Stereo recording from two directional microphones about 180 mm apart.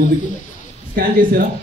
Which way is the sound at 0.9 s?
55° right (ahead or behind).